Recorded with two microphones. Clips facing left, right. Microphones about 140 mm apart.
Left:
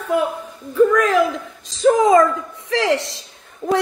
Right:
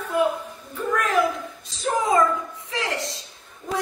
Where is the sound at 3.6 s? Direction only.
80° left.